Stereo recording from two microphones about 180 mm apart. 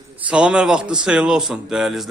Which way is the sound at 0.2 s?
5° right (ahead or behind).